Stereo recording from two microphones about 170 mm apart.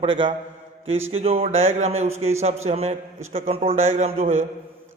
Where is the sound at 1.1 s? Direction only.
35° right (ahead or behind).